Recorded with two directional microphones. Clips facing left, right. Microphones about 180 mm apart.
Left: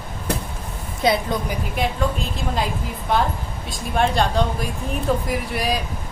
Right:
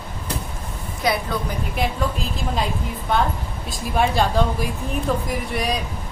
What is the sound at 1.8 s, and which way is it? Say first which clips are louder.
Speech: left 1 dB; centre (ahead or behind).